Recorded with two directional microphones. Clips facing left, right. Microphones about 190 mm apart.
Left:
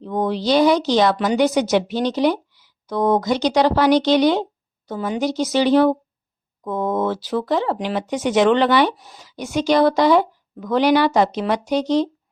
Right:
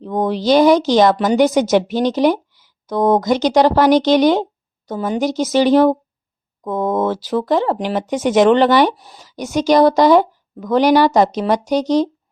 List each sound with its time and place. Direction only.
0.0 s speech: 45° right (ahead or behind)